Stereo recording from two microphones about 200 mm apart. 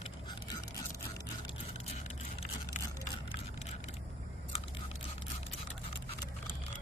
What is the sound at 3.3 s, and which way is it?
Vehicle, 35° left (ahead or behind).